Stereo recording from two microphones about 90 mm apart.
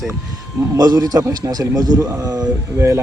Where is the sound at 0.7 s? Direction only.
45° right (ahead or behind).